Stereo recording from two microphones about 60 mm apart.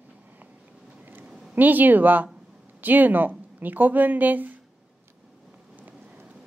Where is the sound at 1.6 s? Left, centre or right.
Right.